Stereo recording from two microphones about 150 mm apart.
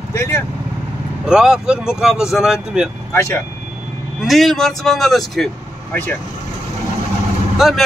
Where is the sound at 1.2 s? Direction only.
5° right (ahead or behind).